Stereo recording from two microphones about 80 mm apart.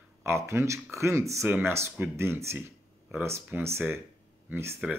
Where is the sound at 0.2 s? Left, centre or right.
Right.